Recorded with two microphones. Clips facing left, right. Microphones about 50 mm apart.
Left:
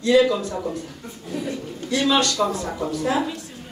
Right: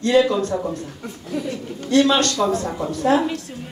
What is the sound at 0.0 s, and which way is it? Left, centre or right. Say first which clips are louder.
Speech: right 1 dB; right.